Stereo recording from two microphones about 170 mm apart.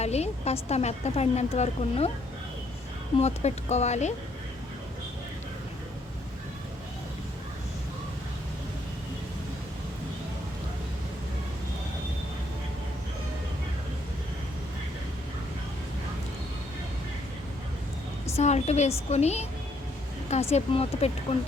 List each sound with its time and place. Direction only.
0.0 s a woman's voice: 40° left (ahead or behind)
3.2 s a woman's voice: 40° left (ahead or behind)
18.3 s a woman's voice: 40° left (ahead or behind)